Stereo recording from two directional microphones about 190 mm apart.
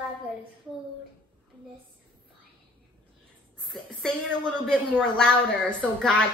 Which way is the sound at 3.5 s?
5° left (ahead or behind).